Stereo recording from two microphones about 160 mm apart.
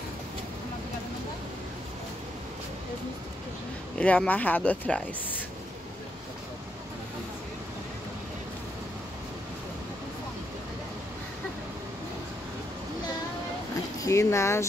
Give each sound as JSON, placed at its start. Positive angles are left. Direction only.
{"t": 4.0, "sound": "speech", "side_deg": 10}
{"t": 14.0, "sound": "speech", "side_deg": 20}